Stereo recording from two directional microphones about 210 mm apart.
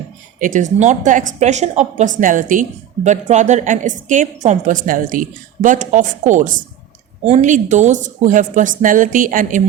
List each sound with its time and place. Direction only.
0.3 s speech: 40° right (ahead or behind)